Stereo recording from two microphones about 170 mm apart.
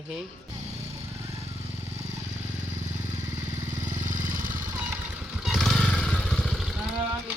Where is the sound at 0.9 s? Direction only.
40° right (ahead or behind).